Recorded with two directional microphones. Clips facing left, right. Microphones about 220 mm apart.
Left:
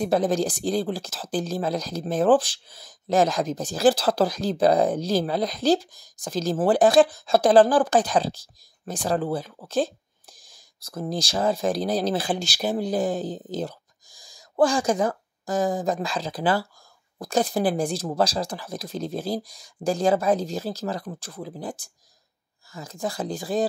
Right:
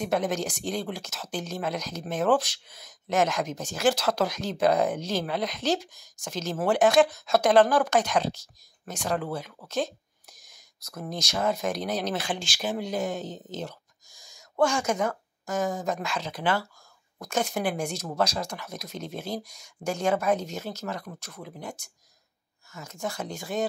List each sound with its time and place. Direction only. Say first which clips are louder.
0.0 s speech: left 5 dB; 35° left (ahead or behind)